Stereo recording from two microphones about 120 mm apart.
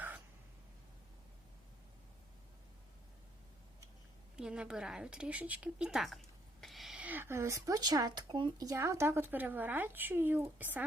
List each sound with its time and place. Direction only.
4.4 s speech: 5° right (ahead or behind); by 8.6 s 40° right (ahead or behind)
8.6 s speech: 25° right (ahead or behind)